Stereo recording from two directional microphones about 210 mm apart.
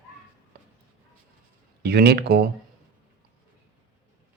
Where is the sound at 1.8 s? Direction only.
50° right (ahead or behind).